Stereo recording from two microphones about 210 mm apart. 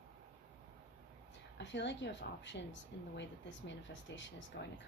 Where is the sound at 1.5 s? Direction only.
55° left (ahead or behind).